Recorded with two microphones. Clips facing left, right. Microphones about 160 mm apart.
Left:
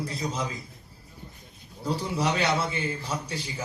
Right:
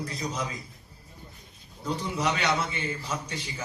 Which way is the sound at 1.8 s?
35° left (ahead or behind).